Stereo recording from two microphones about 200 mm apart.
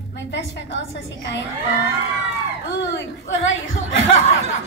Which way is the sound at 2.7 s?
60° left (ahead or behind).